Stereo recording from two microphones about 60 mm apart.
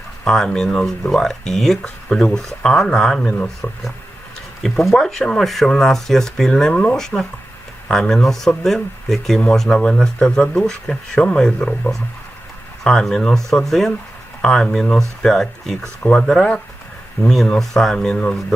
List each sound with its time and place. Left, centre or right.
0.3 s speech: centre
3.2 s speech: left
4.6 s speech: centre